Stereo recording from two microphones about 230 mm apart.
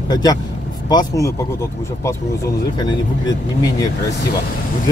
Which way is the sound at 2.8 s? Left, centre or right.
Centre.